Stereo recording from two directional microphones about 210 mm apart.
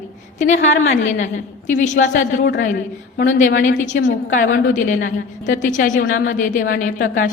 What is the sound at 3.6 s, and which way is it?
A woman's voice, 35° left (ahead or behind).